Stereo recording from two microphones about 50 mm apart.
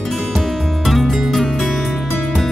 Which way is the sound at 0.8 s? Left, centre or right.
Centre.